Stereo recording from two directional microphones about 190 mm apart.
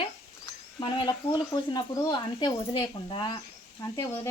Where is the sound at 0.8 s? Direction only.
25° left (ahead or behind).